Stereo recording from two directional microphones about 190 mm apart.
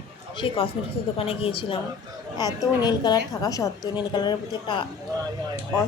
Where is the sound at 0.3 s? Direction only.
30° left (ahead or behind).